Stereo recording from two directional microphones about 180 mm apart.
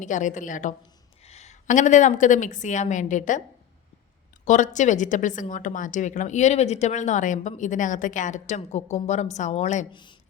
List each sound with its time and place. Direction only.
0.0 s a woman's voice: 45° left (ahead or behind)
4.4 s a woman's voice: 45° left (ahead or behind)
9.9 s speech: 25° left (ahead or behind)